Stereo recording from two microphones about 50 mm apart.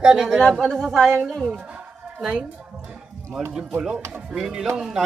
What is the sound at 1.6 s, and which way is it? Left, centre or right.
Music, right.